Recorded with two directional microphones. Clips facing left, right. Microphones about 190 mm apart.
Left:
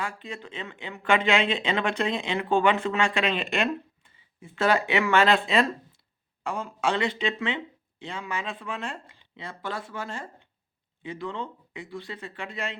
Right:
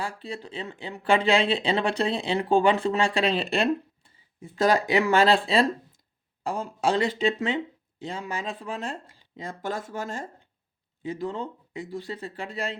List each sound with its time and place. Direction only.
0.0 s speech: 35° right (ahead or behind)